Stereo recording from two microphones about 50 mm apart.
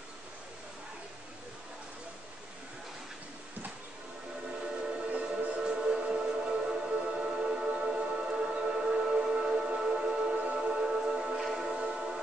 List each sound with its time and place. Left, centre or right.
5.1 s music: right